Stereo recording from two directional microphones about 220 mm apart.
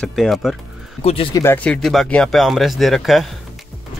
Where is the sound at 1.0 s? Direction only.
25° left (ahead or behind).